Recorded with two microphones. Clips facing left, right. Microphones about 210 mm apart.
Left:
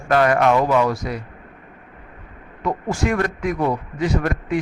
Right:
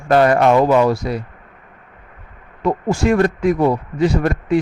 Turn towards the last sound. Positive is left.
turn(degrees=-30)  # may be behind; listen again after turning